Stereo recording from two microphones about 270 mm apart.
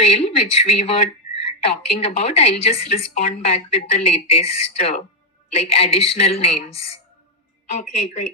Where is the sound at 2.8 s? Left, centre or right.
Left.